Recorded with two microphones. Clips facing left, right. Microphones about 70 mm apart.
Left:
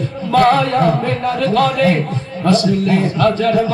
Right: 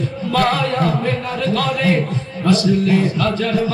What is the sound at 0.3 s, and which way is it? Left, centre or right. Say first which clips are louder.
Chant: left 6 dB; left.